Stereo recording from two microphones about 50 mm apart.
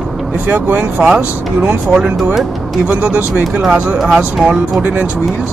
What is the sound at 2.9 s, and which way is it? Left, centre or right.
Speech, centre.